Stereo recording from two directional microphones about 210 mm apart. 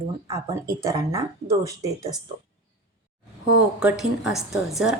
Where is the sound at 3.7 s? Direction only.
5° right (ahead or behind).